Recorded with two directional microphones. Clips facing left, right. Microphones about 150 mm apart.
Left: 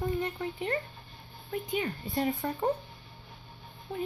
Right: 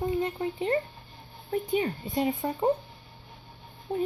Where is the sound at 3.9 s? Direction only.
40° right (ahead or behind).